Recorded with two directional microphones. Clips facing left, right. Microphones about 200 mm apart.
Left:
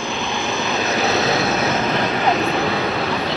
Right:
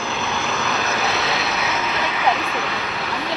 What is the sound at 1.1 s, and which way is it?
Vehicle, 45° left (ahead or behind).